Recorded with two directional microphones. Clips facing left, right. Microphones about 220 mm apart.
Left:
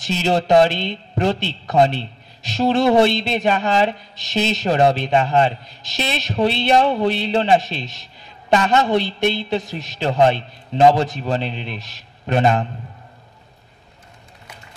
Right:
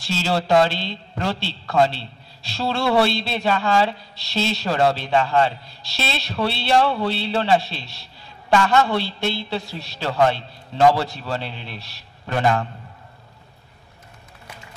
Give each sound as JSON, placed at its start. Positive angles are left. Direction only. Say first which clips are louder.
{"t": 0.0, "sound": "a woman's voice", "louder": "left 4 dB", "side_deg": 20}